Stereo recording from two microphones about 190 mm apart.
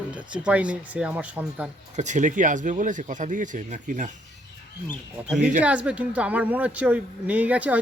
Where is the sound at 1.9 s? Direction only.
40° right (ahead or behind).